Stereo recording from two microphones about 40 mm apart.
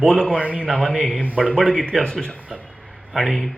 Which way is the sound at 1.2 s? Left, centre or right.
Right.